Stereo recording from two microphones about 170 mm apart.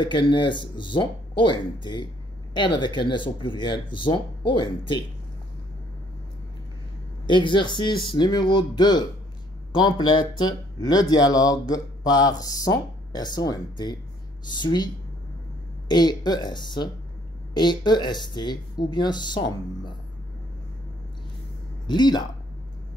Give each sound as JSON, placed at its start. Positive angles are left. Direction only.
{"t": 0.0, "sound": "speech", "side_deg": 30}
{"t": 7.2, "sound": "speech", "side_deg": 30}
{"t": 15.9, "sound": "speech", "side_deg": 25}
{"t": 21.8, "sound": "speech", "side_deg": 25}